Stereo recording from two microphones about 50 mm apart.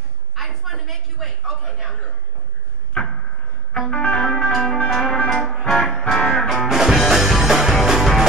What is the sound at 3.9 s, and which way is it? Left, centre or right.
Music, left.